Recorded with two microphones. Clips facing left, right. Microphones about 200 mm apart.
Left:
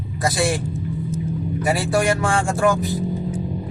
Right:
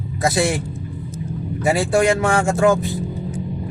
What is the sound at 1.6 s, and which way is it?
Vehicle, 25° right (ahead or behind).